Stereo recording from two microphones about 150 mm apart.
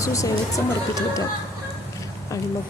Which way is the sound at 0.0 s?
20° left (ahead or behind).